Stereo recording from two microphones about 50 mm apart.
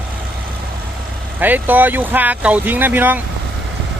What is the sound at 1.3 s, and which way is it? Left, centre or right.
Speech, right.